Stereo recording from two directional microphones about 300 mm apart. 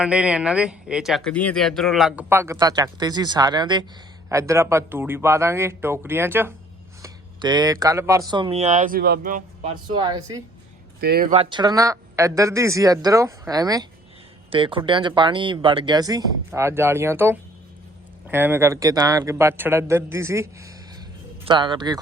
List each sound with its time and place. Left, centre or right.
0.0 s speech: centre; by 9.7 s right
9.9 s speech: centre
11.0 s speech: right; by 22.0 s centre